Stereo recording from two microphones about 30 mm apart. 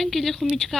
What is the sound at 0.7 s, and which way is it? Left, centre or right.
Speech, left.